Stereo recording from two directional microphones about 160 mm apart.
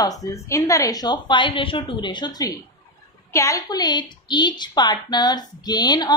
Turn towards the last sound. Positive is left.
turn(degrees=25)  # may be behind; listen again after turning